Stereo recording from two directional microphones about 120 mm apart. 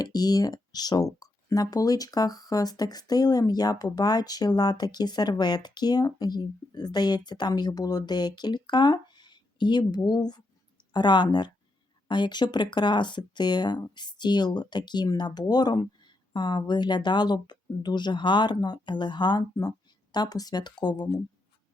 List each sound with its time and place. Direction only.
0.0 s speech: 35° left (ahead or behind)